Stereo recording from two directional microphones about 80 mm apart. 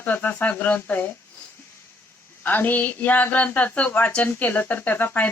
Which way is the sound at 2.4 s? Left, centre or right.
Left.